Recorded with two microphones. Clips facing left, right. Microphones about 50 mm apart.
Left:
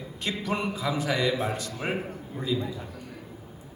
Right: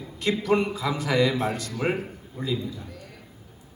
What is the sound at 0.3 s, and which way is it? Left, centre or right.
A man's voice, right.